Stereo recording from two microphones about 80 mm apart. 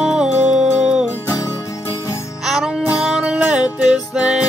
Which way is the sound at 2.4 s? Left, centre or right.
Centre.